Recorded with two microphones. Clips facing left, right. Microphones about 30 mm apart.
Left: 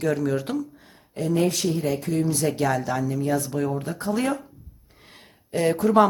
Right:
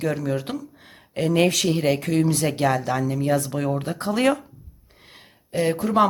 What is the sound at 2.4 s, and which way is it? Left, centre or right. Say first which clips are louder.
Speech: right 1 dB; right.